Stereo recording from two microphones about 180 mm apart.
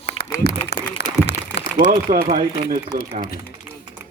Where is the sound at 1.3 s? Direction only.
75° left (ahead or behind).